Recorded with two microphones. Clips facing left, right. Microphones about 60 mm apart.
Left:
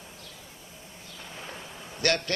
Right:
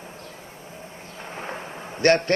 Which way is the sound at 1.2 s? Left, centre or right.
Right.